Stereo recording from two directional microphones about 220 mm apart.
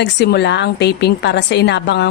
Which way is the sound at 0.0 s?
50° left (ahead or behind).